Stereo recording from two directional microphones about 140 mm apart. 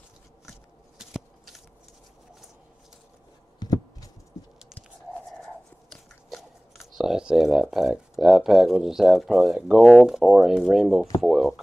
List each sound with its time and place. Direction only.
0.5 s biting: centre (ahead or behind)
3.5 s a sound: 25° left (ahead or behind)
6.3 s speech: centre (ahead or behind)